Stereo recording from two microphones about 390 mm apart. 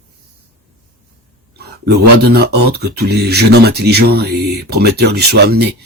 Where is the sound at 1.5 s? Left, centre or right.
Right.